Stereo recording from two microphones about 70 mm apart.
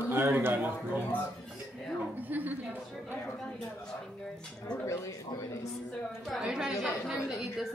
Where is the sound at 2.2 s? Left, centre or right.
Right.